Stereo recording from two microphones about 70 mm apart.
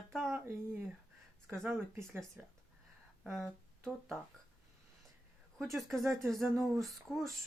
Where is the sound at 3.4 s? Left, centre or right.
Right.